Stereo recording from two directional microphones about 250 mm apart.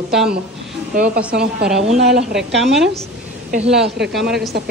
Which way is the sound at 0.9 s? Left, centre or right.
Right.